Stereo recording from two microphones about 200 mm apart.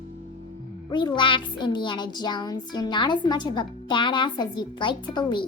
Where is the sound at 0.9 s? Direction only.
25° left (ahead or behind).